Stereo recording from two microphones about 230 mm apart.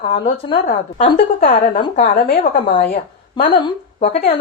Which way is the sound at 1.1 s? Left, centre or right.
Left.